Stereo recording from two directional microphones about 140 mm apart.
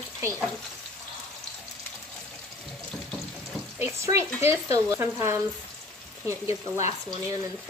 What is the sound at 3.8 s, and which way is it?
Speech, 20° right (ahead or behind).